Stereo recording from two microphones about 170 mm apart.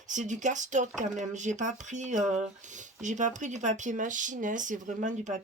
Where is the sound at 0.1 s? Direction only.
45° right (ahead or behind).